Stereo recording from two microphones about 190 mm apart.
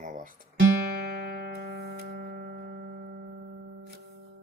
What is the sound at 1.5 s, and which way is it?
Music, 55° right (ahead or behind).